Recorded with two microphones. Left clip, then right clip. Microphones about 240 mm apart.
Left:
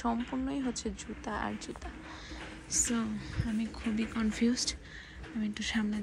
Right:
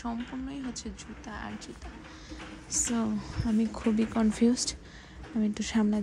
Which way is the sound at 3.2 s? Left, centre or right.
Right.